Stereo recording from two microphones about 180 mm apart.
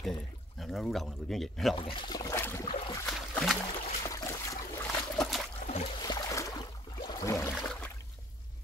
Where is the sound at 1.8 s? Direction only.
30° left (ahead or behind).